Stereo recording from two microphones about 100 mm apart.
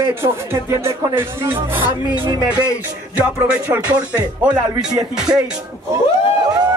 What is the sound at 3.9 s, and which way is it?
Speech, 15° right (ahead or behind).